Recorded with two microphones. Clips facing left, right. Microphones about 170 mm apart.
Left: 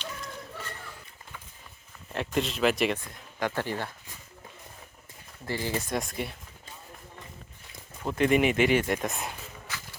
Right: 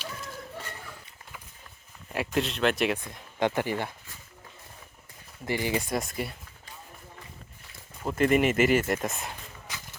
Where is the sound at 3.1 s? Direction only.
20° right (ahead or behind).